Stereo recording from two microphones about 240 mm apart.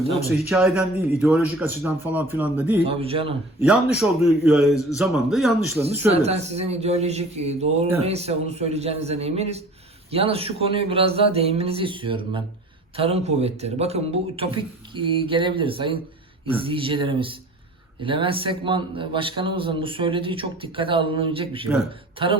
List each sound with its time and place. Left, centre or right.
0.8 s speech: centre
2.8 s a man's voice: right
3.6 s speech: centre
6.1 s a man's voice: right